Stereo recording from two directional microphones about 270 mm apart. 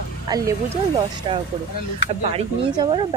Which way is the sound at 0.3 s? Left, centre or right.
Centre.